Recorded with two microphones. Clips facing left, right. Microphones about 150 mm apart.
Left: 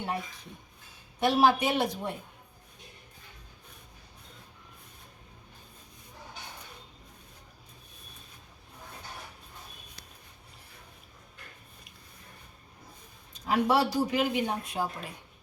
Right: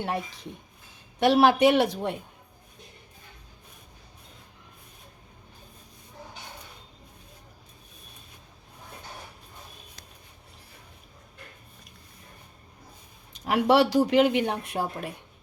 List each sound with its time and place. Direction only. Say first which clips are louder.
1.2 s speech: right 5 dB; 70° right (ahead or behind)
13.5 s speech: right 5 dB; 75° right (ahead or behind)